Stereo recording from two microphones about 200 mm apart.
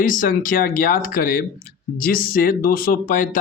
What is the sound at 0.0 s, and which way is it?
Speech, 45° left (ahead or behind).